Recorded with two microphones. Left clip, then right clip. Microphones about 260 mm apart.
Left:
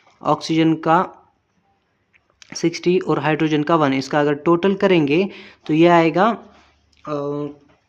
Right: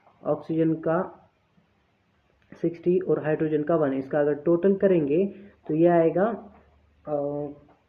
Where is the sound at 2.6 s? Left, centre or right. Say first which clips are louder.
Left 6 dB; left.